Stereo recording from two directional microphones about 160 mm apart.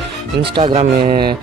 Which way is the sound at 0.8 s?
60° right (ahead or behind).